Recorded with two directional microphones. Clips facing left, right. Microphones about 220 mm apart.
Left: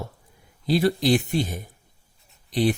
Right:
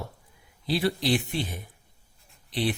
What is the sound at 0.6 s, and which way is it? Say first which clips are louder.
Speech: left 5 dB; 45° left (ahead or behind).